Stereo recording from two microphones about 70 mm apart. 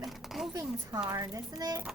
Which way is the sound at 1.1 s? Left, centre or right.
Right.